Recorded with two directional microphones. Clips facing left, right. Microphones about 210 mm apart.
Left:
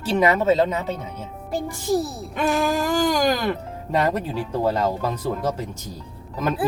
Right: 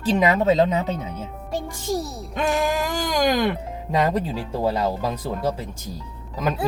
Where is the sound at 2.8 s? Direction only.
15° right (ahead or behind).